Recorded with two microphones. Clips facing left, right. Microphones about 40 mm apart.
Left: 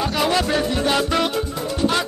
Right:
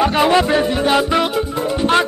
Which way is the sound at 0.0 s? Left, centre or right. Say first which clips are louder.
Right 6 dB; right.